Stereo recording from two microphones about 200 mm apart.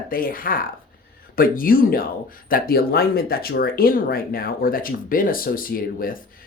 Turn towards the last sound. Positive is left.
turn(degrees=45)  # may be behind; listen again after turning